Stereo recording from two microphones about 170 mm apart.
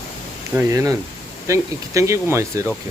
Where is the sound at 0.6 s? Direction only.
20° right (ahead or behind).